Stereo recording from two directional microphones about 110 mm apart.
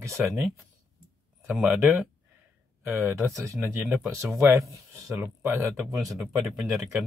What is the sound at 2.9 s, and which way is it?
Speech, 25° right (ahead or behind).